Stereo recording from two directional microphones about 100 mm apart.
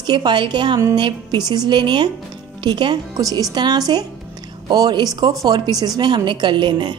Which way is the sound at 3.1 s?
35° right (ahead or behind).